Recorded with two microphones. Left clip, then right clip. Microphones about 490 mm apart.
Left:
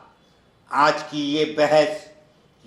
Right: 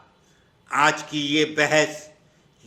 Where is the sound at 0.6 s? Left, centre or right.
Right.